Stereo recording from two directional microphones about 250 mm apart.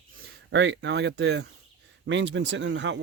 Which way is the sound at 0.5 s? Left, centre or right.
Right.